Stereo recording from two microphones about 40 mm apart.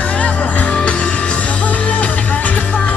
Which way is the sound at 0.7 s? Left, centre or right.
Left.